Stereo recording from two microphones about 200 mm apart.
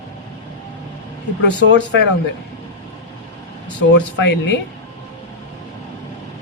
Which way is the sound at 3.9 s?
60° left (ahead or behind).